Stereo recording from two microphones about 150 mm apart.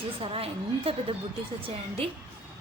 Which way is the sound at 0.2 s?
40° right (ahead or behind).